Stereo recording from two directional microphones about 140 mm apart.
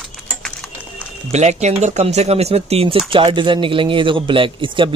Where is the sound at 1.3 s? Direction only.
55° right (ahead or behind).